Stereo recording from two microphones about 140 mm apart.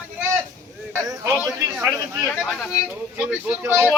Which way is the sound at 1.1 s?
15° right (ahead or behind).